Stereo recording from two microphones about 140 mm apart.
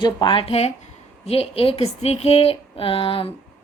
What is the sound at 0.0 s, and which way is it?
A woman's voice, 35° left (ahead or behind).